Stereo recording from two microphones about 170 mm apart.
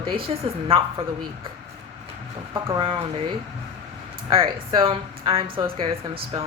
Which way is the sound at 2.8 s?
30° right (ahead or behind).